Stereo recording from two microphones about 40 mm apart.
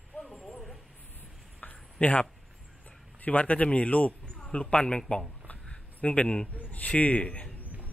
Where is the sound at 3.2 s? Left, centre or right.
Left.